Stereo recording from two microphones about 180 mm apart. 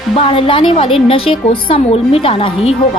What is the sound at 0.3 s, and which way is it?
A woman's voice, 30° left (ahead or behind).